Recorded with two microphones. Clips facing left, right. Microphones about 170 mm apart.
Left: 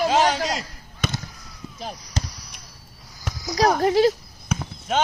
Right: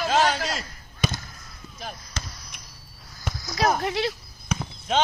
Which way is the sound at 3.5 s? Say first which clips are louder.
Left 6 dB; 35° left (ahead or behind).